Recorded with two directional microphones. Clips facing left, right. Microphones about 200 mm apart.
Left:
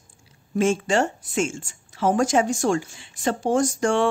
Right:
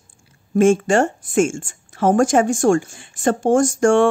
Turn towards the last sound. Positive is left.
turn(degrees=-50)  # may be behind; listen again after turning